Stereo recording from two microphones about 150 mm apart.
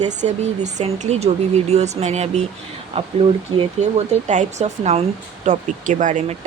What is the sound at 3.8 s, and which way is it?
Speech, 50° right (ahead or behind).